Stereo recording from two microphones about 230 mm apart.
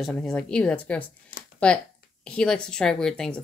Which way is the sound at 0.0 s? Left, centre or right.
Centre.